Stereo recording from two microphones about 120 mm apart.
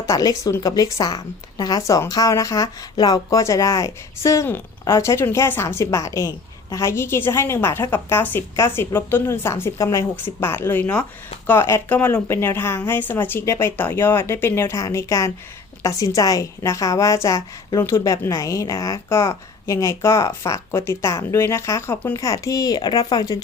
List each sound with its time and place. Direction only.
0.1 s a woman's voice: 30° left (ahead or behind)